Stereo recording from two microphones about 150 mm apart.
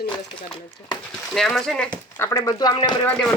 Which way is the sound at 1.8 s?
20° left (ahead or behind).